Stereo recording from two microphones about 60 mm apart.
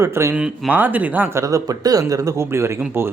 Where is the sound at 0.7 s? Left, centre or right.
Right.